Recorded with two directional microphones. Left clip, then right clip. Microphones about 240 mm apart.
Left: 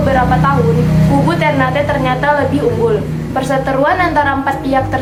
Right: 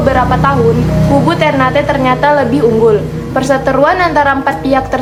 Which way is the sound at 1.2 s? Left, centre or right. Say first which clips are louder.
Right 3 dB; right.